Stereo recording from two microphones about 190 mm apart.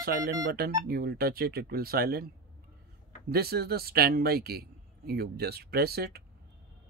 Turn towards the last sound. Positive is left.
turn(degrees=-55)  # may be behind; listen again after turning